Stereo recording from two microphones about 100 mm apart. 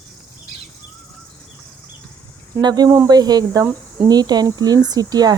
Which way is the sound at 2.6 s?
45° right (ahead or behind).